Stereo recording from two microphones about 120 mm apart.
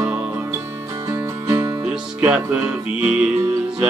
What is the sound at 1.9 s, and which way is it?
Music, 10° right (ahead or behind).